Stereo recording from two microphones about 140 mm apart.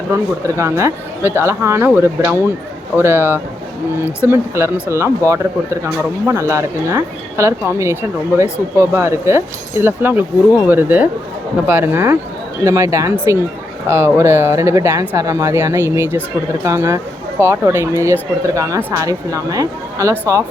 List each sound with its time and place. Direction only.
0.4 s speech: 20° right (ahead or behind)